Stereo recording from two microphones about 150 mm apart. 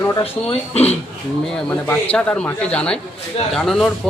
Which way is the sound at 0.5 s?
45° left (ahead or behind).